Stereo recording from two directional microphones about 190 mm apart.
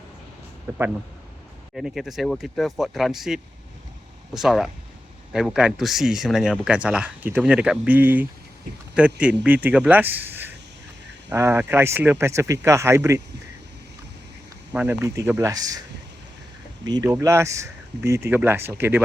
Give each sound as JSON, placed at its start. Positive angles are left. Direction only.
{"t": 1.7, "sound": "speech", "side_deg": 0}
{"t": 14.7, "sound": "speech", "side_deg": -10}
{"t": 16.8, "sound": "speech", "side_deg": -20}